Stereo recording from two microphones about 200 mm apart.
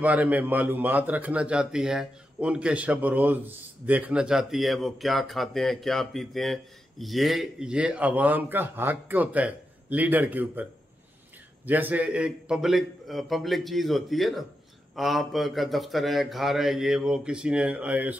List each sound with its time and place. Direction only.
0.0 s a man's voice: 10° right (ahead or behind)